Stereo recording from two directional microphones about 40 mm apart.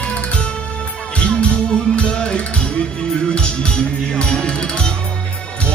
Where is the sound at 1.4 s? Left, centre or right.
Left.